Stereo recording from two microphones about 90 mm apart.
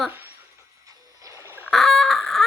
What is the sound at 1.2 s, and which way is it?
Goose, 35° right (ahead or behind).